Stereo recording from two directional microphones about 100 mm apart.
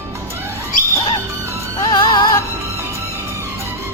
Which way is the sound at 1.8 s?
40° left (ahead or behind).